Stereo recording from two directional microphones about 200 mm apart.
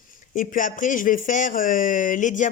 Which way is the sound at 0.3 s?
40° left (ahead or behind).